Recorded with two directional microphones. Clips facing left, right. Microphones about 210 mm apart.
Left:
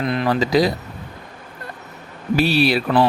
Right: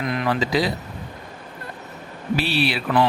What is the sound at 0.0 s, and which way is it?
Speech, 30° left (ahead or behind).